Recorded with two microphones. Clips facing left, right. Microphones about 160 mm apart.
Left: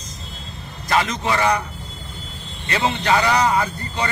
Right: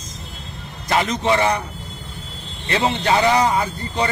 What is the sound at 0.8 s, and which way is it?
Speech, 20° right (ahead or behind).